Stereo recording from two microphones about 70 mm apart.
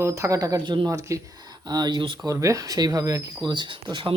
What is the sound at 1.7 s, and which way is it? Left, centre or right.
Speech, right.